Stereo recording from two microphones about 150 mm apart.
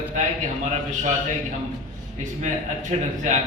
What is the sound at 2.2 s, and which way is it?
Speech, 55° right (ahead or behind).